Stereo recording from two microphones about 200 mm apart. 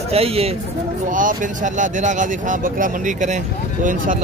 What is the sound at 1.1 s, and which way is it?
Speech, 40° right (ahead or behind).